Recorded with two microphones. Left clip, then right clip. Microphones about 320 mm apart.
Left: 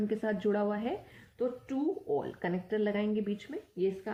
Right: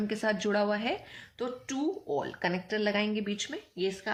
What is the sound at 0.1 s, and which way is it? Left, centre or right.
Speech, centre.